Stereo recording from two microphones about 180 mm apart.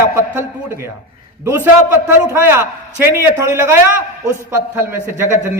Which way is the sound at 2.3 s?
15° right (ahead or behind).